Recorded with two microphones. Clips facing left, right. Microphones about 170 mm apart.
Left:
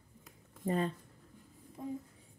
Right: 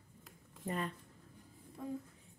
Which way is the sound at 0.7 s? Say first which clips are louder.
Left 6 dB; 30° left (ahead or behind).